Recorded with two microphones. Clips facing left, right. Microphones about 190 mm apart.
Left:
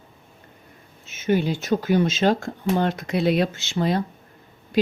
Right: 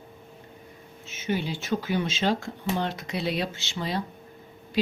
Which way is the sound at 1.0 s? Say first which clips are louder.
Left 7 dB; 50° left (ahead or behind).